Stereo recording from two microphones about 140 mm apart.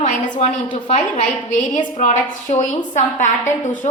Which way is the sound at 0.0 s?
55° left (ahead or behind).